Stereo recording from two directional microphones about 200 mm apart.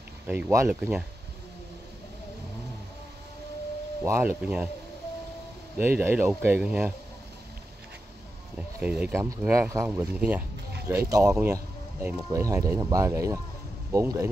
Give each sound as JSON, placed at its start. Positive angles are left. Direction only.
{"t": 0.3, "sound": "speech", "side_deg": -10}
{"t": 4.0, "sound": "speech", "side_deg": -10}
{"t": 5.8, "sound": "speech", "side_deg": -10}
{"t": 8.5, "sound": "speech", "side_deg": -5}